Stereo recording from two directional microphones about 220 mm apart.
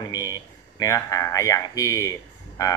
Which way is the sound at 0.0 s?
15° left (ahead or behind).